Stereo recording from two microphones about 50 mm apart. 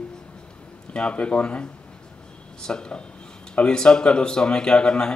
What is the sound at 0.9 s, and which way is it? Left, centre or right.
Speech, left.